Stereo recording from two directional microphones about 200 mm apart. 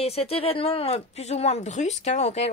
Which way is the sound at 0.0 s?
30° left (ahead or behind).